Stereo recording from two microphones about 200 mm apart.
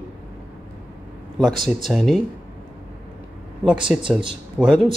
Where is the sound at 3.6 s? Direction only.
5° right (ahead or behind).